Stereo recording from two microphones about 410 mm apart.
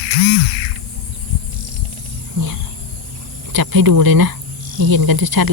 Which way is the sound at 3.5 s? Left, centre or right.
Right.